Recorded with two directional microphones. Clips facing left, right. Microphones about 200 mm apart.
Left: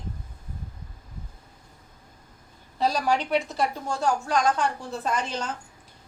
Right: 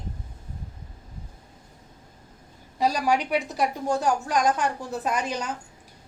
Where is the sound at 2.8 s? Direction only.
15° right (ahead or behind).